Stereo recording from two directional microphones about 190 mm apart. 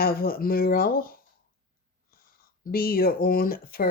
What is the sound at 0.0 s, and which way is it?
Speech, 50° left (ahead or behind).